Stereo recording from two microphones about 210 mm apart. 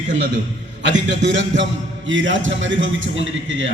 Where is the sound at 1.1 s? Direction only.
60° right (ahead or behind).